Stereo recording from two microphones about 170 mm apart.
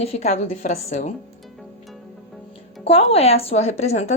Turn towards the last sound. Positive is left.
turn(degrees=40)  # may be behind; listen again after turning